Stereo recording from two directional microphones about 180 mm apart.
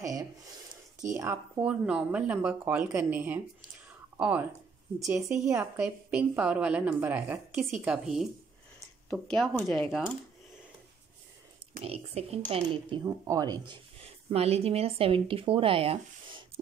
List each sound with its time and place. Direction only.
0.0 s a sound: 20° right (ahead or behind)
1.1 s a woman's voice: 15° right (ahead or behind)
11.8 s speech: 35° right (ahead or behind)